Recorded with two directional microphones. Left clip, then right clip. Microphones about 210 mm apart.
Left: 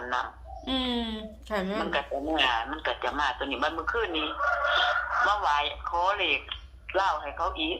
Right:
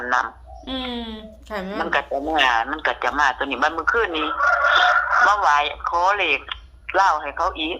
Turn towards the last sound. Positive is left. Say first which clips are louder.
# right 6 dB
turn(degrees=-50)  # may be behind; listen again after turning